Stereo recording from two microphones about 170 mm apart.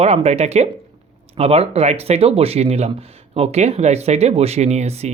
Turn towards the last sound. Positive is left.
turn(degrees=-40)  # may be behind; listen again after turning